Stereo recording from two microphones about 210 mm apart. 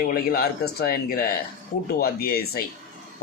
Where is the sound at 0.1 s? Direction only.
45° left (ahead or behind).